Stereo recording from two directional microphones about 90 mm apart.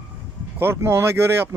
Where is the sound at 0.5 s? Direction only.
25° right (ahead or behind).